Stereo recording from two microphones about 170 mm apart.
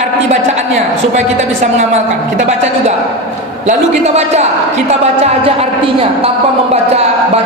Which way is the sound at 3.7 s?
40° right (ahead or behind).